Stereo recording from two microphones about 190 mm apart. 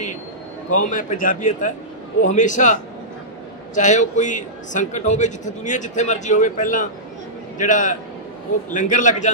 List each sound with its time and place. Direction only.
0.7 s a man's voice: 45° left (ahead or behind)